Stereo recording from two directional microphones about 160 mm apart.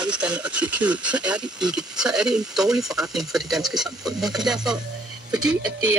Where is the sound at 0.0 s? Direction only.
5° right (ahead or behind).